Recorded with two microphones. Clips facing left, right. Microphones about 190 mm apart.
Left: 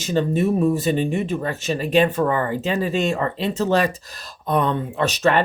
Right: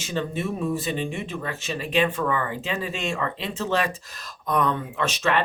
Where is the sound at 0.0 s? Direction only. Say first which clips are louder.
Left 8 dB; 40° left (ahead or behind).